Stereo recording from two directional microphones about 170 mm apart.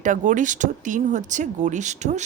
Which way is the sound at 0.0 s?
50° right (ahead or behind).